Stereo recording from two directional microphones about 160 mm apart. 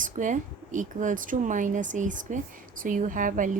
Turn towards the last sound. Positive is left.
turn(degrees=-55)  # may be behind; listen again after turning